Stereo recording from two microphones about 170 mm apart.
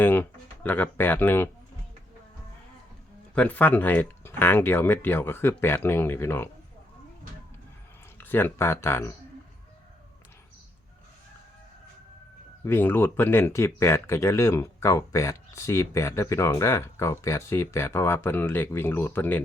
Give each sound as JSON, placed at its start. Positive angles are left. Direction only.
{"t": 0.0, "sound": "speech", "side_deg": 10}
{"t": 3.3, "sound": "speech", "side_deg": 10}
{"t": 8.2, "sound": "speech", "side_deg": 10}
{"t": 12.6, "sound": "speech", "side_deg": 15}